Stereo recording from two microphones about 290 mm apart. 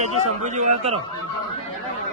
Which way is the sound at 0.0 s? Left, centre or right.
Right.